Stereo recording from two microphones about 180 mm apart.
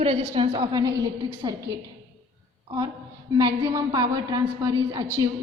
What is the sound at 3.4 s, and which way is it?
A woman's voice, 20° right (ahead or behind).